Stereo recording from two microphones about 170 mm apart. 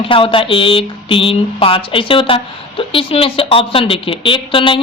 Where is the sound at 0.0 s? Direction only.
30° left (ahead or behind).